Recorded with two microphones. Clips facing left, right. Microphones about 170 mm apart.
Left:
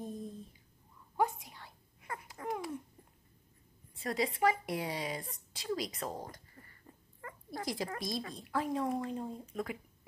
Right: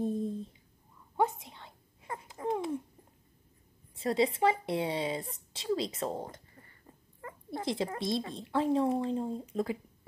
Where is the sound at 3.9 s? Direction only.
30° right (ahead or behind).